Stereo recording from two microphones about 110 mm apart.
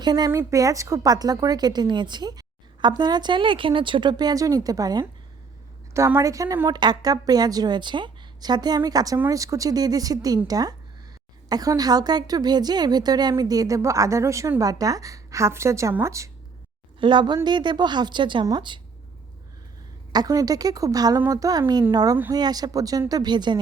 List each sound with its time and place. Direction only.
0.0 s a woman's voice: 40° right (ahead or behind)
6.2 s a woman's voice: 30° right (ahead or behind)
17.0 s a woman's voice: 45° right (ahead or behind)
20.1 s a woman's voice: 35° right (ahead or behind)